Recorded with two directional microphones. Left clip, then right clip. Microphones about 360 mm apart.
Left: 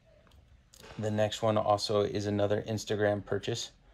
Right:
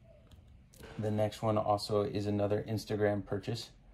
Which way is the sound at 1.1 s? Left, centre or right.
Left.